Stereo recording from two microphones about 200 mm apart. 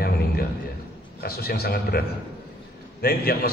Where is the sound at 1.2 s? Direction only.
50° left (ahead or behind).